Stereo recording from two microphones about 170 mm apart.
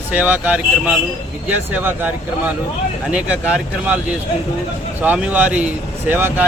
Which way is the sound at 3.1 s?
5° right (ahead or behind).